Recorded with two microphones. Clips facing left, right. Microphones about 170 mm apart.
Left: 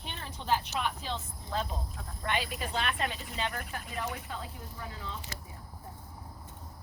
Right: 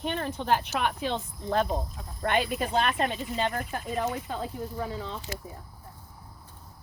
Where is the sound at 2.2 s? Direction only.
50° right (ahead or behind).